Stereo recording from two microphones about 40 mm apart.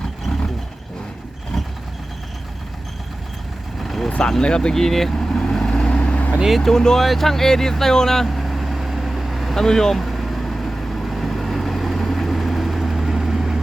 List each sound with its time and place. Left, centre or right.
0.0 s vehicle: centre
3.8 s vehicle: centre
4.2 s speech: centre
4.8 s vehicle: centre
6.6 s speech: centre
7.0 s vehicle: centre
9.6 s speech: centre
10.0 s vehicle: centre